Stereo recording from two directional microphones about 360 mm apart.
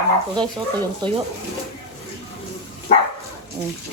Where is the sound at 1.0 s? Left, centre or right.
Centre.